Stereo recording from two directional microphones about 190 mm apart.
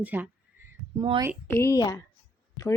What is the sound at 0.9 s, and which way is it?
Speech, 20° right (ahead or behind).